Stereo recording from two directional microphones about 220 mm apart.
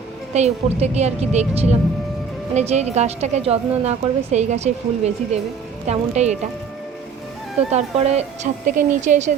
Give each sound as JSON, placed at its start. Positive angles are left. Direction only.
{"t": 0.3, "sound": "a woman's voice", "side_deg": -30}
{"t": 7.7, "sound": "a woman's voice", "side_deg": -30}